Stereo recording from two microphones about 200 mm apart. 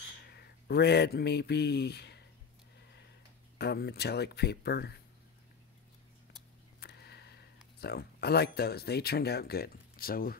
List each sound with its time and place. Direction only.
0.3 s speech: 55° left (ahead or behind)
3.5 s speech: 55° left (ahead or behind)
6.8 s a sound: 55° left (ahead or behind)
7.8 s speech: 55° left (ahead or behind)